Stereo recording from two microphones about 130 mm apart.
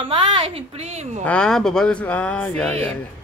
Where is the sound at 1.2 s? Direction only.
10° left (ahead or behind).